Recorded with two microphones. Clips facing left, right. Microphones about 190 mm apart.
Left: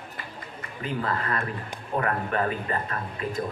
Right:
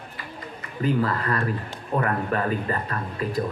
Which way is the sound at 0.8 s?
35° right (ahead or behind).